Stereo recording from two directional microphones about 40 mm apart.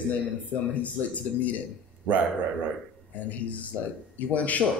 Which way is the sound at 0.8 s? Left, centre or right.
Left.